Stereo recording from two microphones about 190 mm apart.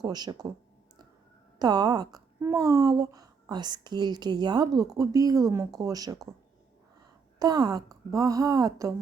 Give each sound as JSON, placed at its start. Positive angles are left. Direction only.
{"t": 0.0, "sound": "a woman's voice", "side_deg": -20}
{"t": 1.5, "sound": "a woman's voice", "side_deg": -20}
{"t": 7.3, "sound": "a woman's voice", "side_deg": -20}